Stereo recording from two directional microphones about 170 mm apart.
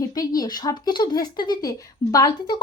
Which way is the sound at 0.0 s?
20° left (ahead or behind).